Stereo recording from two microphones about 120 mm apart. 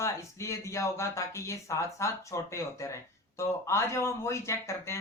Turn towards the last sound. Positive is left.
turn(degrees=25)  # may be behind; listen again after turning